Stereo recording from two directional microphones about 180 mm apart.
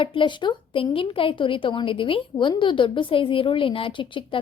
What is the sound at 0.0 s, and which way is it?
A woman's voice, 30° left (ahead or behind).